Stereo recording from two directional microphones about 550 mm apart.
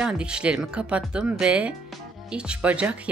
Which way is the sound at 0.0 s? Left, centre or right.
Centre.